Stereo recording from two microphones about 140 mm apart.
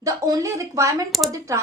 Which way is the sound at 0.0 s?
25° right (ahead or behind).